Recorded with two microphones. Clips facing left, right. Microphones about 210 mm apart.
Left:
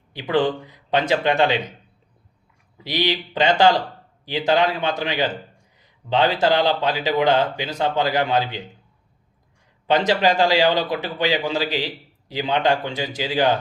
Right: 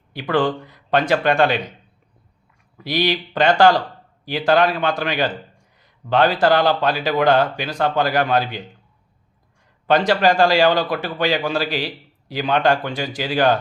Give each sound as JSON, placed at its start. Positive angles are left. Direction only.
{"t": 0.1, "sound": "speech", "side_deg": 20}
{"t": 2.7, "sound": "speech", "side_deg": 20}
{"t": 9.8, "sound": "speech", "side_deg": 20}